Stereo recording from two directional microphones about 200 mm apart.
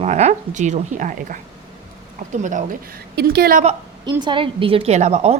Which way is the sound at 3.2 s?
50° right (ahead or behind).